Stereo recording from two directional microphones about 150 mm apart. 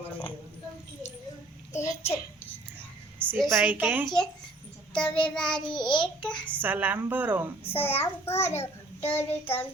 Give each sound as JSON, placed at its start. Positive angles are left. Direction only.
{"t": 1.7, "sound": "a sound", "side_deg": 15}
{"t": 3.2, "sound": "a woman's voice", "side_deg": 0}
{"t": 3.7, "sound": "a woman's voice", "side_deg": -10}
{"t": 4.0, "sound": "child singing", "side_deg": 5}
{"t": 6.6, "sound": "a woman's voice", "side_deg": -10}
{"t": 7.6, "sound": "a child's voice", "side_deg": 15}